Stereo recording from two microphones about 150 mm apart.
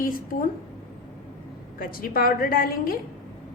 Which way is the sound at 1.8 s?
75° left (ahead or behind).